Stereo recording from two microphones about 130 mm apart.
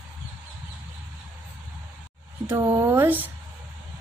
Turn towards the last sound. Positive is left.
turn(degrees=-15)  # may be behind; listen again after turning